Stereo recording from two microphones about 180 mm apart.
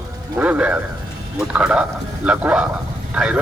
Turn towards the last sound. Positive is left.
turn(degrees=-5)  # may be behind; listen again after turning